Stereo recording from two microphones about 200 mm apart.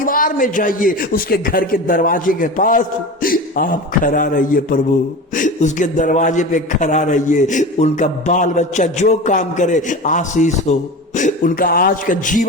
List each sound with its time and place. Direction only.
0.0 s a man's voice: 45° left (ahead or behind)